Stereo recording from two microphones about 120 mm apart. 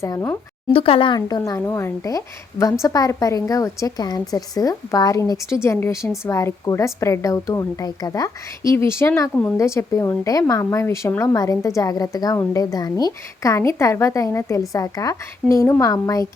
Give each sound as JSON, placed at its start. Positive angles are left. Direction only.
{"t": 0.0, "sound": "a woman's voice", "side_deg": 25}
{"t": 0.7, "sound": "speech", "side_deg": 50}
{"t": 1.5, "sound": "a woman's voice", "side_deg": 20}